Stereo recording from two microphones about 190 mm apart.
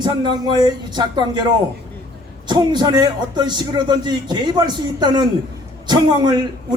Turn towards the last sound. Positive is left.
turn(degrees=-20)  # may be behind; listen again after turning